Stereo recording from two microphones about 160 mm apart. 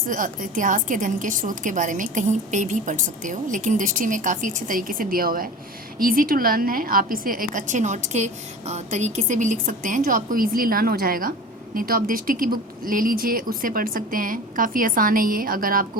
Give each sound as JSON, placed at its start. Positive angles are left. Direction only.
{"t": 0.1, "sound": "a woman's voice", "side_deg": -55}